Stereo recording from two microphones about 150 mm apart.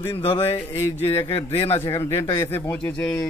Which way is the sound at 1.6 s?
15° left (ahead or behind).